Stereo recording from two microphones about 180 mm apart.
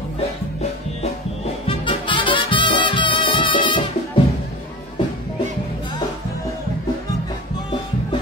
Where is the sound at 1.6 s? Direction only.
30° left (ahead or behind).